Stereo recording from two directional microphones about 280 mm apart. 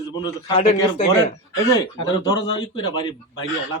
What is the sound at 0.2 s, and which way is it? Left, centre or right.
Speech, centre.